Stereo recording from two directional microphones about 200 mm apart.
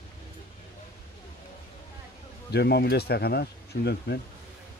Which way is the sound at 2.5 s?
55° left (ahead or behind).